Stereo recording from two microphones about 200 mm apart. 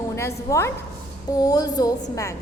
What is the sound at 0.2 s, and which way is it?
A woman's voice, 15° left (ahead or behind).